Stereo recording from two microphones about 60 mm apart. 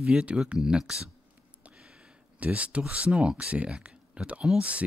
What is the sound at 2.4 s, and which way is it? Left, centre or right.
Speech, right.